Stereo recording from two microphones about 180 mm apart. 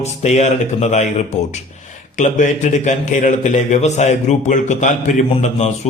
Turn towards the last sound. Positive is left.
turn(degrees=35)  # may be behind; listen again after turning